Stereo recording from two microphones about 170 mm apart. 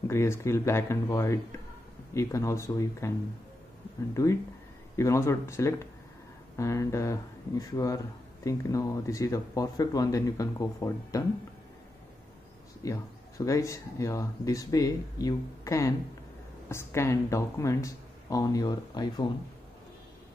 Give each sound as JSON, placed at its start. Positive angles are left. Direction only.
{"t": 0.1, "sound": "speech", "side_deg": 15}
{"t": 4.1, "sound": "speech", "side_deg": 20}
{"t": 12.8, "sound": "speech", "side_deg": 20}